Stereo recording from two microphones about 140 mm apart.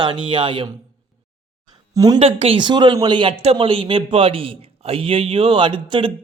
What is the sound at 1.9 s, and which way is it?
Speech, 25° right (ahead or behind).